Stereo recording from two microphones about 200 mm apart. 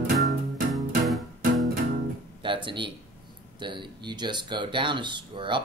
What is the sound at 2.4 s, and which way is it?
Speech, 25° right (ahead or behind).